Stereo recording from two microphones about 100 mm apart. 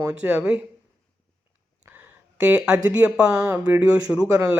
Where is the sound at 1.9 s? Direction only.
20° right (ahead or behind).